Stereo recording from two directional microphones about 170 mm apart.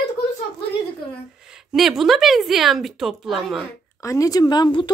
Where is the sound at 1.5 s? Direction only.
5° right (ahead or behind).